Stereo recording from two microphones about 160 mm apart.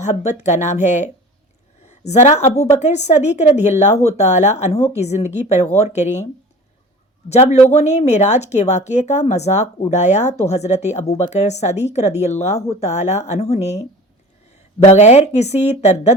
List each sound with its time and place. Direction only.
0.0 s a woman's voice: 45° left (ahead or behind)
7.3 s speech: 40° left (ahead or behind)
14.8 s speech: 45° left (ahead or behind)